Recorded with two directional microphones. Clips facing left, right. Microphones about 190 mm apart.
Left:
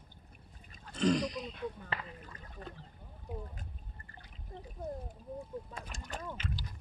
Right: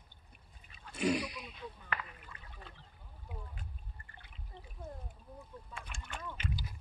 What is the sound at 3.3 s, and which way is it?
Boat, 40° left (ahead or behind).